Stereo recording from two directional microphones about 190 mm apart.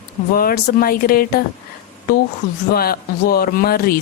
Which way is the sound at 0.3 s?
50° left (ahead or behind).